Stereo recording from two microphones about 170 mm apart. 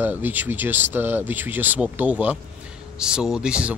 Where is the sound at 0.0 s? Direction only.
10° right (ahead or behind).